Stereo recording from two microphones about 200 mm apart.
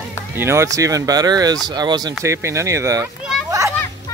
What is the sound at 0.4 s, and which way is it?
Speech, 15° right (ahead or behind).